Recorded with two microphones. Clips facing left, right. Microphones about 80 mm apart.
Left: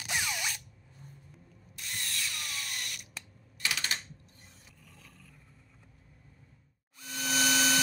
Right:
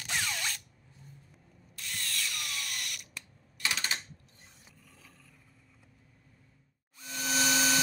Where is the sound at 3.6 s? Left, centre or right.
Right.